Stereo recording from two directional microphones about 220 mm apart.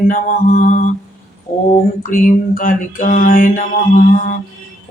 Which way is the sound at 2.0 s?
35° left (ahead or behind).